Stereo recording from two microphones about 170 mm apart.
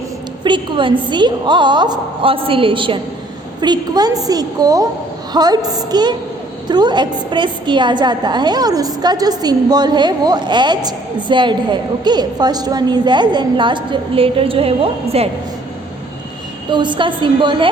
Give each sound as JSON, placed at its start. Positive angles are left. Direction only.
{"t": 0.4, "sound": "a woman's voice", "side_deg": -30}
{"t": 16.7, "sound": "a woman's voice", "side_deg": -25}